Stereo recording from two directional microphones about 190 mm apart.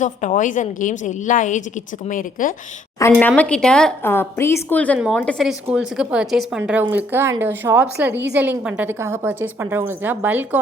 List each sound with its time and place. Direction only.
0.0 s a woman's voice: 40° left (ahead or behind)
3.0 s speech: 10° left (ahead or behind)
4.9 s a woman's voice: 5° right (ahead or behind)